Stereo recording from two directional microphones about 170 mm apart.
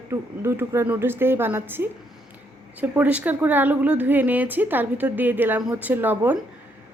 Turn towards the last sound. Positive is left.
turn(degrees=-10)  # may be behind; listen again after turning